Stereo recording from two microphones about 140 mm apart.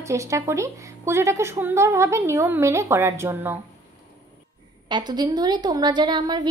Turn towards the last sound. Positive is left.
turn(degrees=-30)  # may be behind; listen again after turning